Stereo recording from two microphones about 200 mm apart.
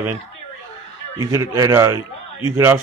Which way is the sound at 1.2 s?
15° right (ahead or behind).